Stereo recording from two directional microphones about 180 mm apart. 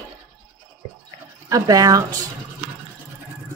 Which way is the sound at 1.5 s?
20° right (ahead or behind).